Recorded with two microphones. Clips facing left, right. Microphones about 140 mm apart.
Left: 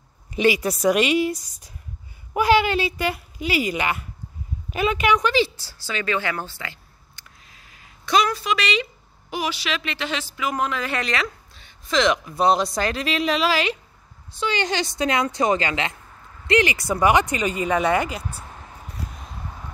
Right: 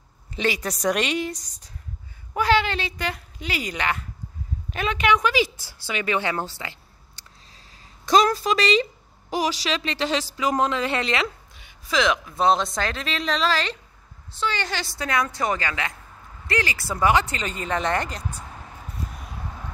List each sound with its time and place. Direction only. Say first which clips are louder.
0.3 s speech: left 6 dB; 10° left (ahead or behind); by 5.5 s 5° right (ahead or behind)
5.6 s speech: even; 20° right (ahead or behind)
7.4 s a sound: even; 30° right (ahead or behind)
9.3 s a woman's voice: right 2 dB; 35° right (ahead or behind); by 18.4 s 10° left (ahead or behind)